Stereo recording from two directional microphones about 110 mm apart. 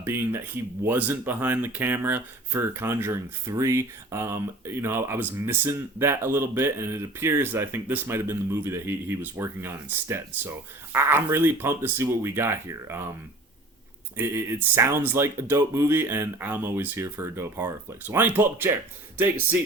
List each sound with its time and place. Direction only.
0.0 s speech: 20° right (ahead or behind)
14.2 s speech: 20° right (ahead or behind)